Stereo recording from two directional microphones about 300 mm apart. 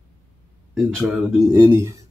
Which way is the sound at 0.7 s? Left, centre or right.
Centre.